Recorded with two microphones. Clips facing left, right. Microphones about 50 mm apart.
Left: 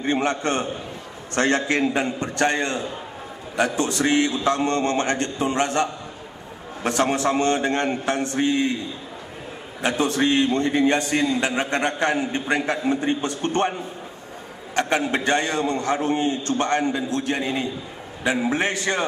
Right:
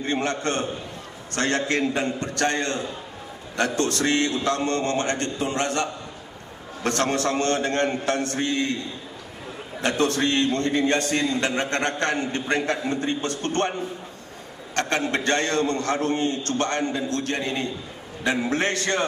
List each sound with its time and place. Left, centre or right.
0.0 s a man's voice: centre
9.8 s a man's voice: centre
14.8 s a man's voice: centre